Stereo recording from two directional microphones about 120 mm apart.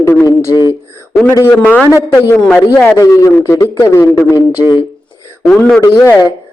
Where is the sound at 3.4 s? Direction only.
30° left (ahead or behind).